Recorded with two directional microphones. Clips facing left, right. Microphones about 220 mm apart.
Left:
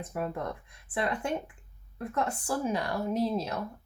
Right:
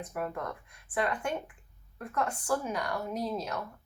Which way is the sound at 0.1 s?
25° left (ahead or behind).